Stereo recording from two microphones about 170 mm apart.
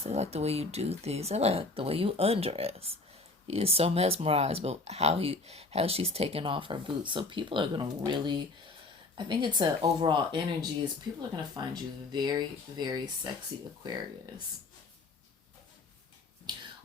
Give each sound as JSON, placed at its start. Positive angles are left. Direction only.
{"t": 0.0, "sound": "speech", "side_deg": -40}